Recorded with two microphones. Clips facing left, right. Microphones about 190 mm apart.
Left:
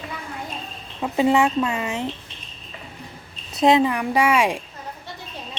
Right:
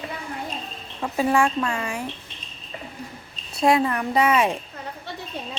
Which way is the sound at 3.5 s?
20° left (ahead or behind).